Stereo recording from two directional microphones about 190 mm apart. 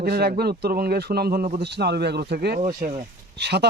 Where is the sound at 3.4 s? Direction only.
60° right (ahead or behind).